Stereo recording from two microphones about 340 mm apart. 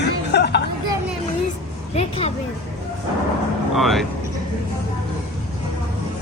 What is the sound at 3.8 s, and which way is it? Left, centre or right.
Speech, centre.